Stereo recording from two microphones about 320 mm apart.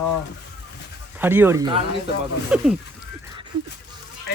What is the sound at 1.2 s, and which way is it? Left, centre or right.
Speech, centre.